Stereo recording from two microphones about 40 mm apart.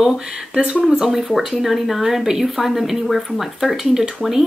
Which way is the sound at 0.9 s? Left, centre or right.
Centre.